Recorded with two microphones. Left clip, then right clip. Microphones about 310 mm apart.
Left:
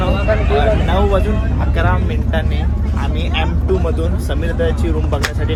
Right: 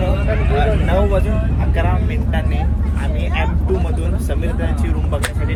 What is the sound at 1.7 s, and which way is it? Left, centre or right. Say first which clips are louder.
Speech: left 3 dB; centre.